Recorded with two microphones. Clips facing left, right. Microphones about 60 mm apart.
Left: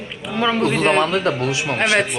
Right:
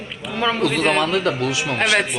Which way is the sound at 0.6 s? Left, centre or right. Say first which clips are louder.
Left 2 dB; left.